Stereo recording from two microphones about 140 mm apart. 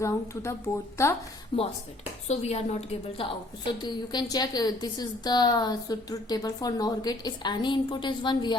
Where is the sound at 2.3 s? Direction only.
50° left (ahead or behind).